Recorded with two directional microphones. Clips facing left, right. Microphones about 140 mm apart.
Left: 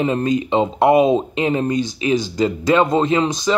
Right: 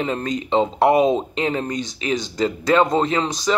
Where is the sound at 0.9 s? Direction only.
Centre (ahead or behind).